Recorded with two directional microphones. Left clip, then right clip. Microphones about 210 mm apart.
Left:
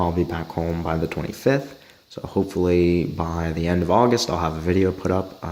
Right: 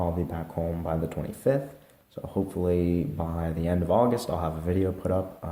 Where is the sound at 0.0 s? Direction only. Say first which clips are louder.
Left 7 dB; 40° left (ahead or behind).